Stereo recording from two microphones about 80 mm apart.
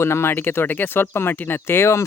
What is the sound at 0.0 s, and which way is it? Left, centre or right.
Speech, left.